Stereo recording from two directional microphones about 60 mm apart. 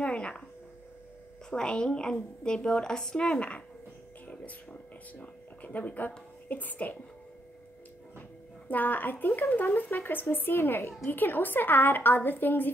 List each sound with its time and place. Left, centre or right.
0.0 s speech: left
1.5 s speech: centre
5.2 s speech: left
8.6 s speech: left